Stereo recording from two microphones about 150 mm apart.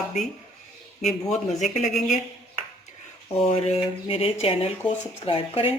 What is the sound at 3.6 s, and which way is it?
Speech, 40° left (ahead or behind).